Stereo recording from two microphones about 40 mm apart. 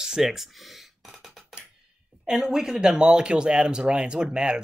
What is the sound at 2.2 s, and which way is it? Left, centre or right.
Speech, centre.